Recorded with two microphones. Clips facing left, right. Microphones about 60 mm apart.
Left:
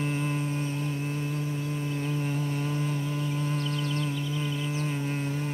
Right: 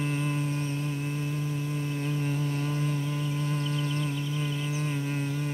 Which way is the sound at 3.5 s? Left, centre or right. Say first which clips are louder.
Even; centre.